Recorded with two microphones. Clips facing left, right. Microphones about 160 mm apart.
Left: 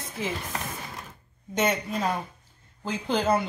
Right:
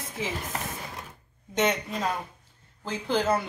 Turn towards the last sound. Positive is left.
turn(degrees=20)  # may be behind; listen again after turning